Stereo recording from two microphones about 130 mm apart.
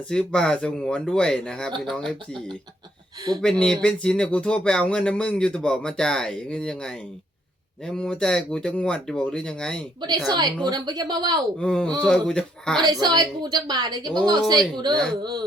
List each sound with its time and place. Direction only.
0.1 s speech: 5° left (ahead or behind)
10.2 s a woman's voice: 35° right (ahead or behind)
11.6 s speech: 10° left (ahead or behind)
12.8 s a woman's voice: 30° right (ahead or behind)